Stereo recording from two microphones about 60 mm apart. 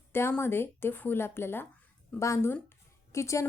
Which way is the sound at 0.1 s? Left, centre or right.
Left.